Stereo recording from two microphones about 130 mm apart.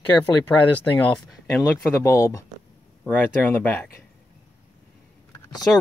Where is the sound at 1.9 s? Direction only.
20° left (ahead or behind).